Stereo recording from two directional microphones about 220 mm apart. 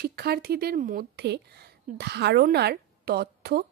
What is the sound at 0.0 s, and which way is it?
A woman's voice, 45° right (ahead or behind).